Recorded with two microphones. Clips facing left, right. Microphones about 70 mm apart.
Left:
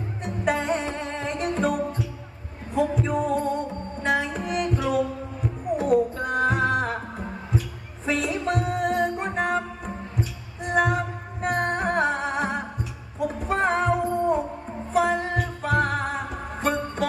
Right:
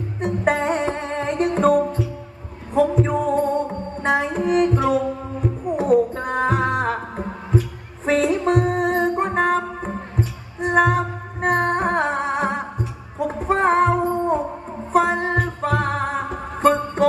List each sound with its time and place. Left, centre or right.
0.2 s music: right
13.2 s a sound: right
14.9 s music: right